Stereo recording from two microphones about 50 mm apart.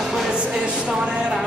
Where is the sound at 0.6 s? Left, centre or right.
Right.